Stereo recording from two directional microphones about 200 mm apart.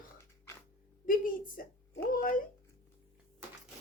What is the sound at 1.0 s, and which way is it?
A woman's voice, 45° left (ahead or behind).